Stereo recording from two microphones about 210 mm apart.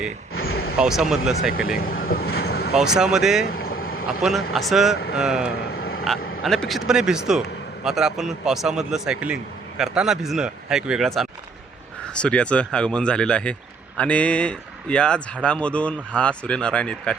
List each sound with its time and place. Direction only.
0.3 s a sound: 50° left (ahead or behind)
0.8 s speech: centre (ahead or behind)
1.8 s vehicle: 45° left (ahead or behind)
2.7 s speech: 5° right (ahead or behind)
3.7 s vehicle: 45° left (ahead or behind)
4.2 s speech: centre (ahead or behind)
5.7 s vehicle: 45° left (ahead or behind)
6.4 s speech: centre (ahead or behind)